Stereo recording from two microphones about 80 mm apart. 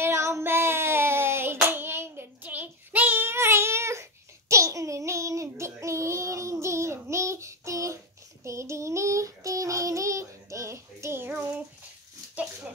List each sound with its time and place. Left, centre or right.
0.0 s hands: right
8.5 s child singing: right